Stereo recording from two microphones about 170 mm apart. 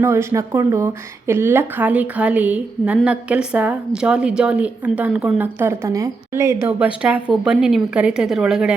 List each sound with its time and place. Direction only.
0.0 s a woman's voice: 15° right (ahead or behind)